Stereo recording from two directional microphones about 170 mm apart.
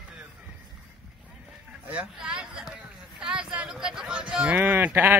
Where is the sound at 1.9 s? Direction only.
5° right (ahead or behind).